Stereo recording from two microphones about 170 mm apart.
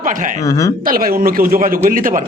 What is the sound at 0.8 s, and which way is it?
Speech, 55° right (ahead or behind).